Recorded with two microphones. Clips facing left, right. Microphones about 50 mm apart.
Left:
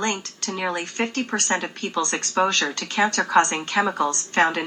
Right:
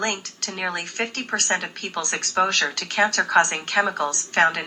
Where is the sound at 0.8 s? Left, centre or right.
Right.